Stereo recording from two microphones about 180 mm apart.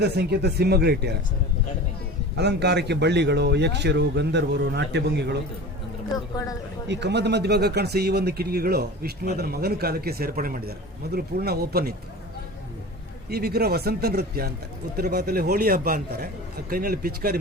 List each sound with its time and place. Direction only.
0.0 s a man's voice: 65° right (ahead or behind)
2.3 s a man's voice: 70° right (ahead or behind)
6.8 s a man's voice: 70° right (ahead or behind)
13.3 s a man's voice: 60° right (ahead or behind)